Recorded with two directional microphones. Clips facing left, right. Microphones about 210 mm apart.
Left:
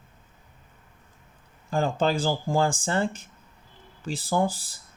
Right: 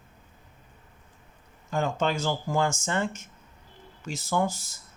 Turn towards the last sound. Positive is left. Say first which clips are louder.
# left 2 dB
turn(degrees=35)  # may be behind; listen again after turning